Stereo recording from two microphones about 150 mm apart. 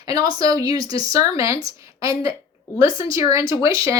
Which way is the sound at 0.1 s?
25° right (ahead or behind).